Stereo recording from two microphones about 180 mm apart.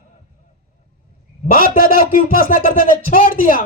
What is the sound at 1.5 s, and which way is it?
Speech, 55° left (ahead or behind).